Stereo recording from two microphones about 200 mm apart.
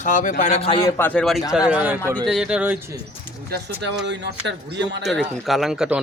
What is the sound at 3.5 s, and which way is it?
Speech, 60° right (ahead or behind).